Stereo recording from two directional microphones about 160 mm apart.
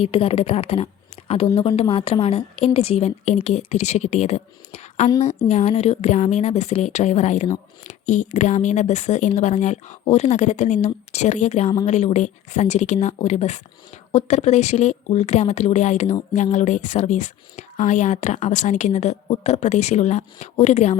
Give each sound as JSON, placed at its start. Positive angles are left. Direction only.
{"t": 0.0, "sound": "a woman's voice", "side_deg": 40}